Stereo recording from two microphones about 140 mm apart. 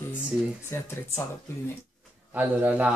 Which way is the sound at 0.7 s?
20° left (ahead or behind).